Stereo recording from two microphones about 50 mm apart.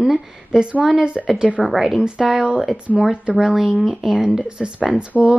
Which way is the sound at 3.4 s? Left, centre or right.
Centre.